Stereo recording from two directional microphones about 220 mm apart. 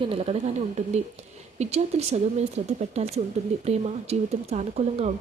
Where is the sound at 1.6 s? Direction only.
30° right (ahead or behind).